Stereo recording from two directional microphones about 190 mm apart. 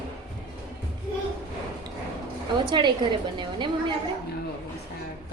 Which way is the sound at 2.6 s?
25° right (ahead or behind).